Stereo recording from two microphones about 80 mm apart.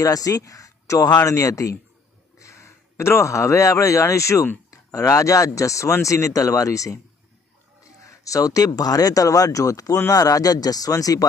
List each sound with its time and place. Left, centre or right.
0.0 s speech: left